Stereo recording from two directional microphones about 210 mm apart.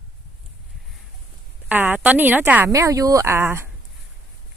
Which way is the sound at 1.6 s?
10° right (ahead or behind).